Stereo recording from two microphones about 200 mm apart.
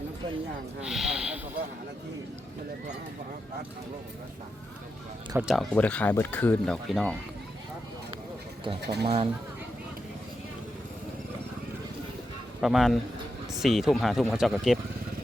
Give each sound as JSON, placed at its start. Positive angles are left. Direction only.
{"t": 0.9, "sound": "speech", "side_deg": -5}
{"t": 5.4, "sound": "speech", "side_deg": 0}
{"t": 8.8, "sound": "speech", "side_deg": -55}
{"t": 9.0, "sound": "speech", "side_deg": -30}
{"t": 12.6, "sound": "speech", "side_deg": 0}